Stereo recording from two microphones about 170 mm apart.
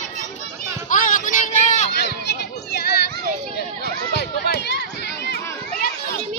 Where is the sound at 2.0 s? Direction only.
80° left.